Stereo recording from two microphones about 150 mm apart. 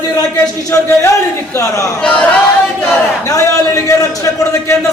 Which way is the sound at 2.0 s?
5° left (ahead or behind).